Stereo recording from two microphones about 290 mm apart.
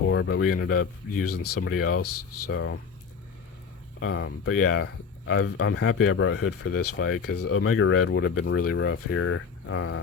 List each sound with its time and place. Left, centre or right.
0.1 s speech: left
4.0 s speech: left